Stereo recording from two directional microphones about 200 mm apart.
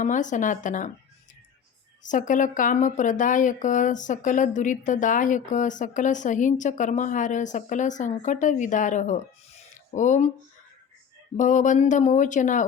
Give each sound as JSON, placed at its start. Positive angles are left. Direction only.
{"t": 0.0, "sound": "speech", "side_deg": 40}
{"t": 2.0, "sound": "speech", "side_deg": 40}
{"t": 11.3, "sound": "speech", "side_deg": 40}